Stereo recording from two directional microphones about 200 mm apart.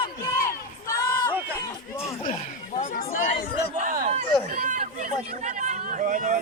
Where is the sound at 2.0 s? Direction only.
30° left (ahead or behind).